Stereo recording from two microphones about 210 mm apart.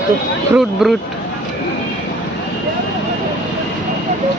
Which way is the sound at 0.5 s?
Centre (ahead or behind).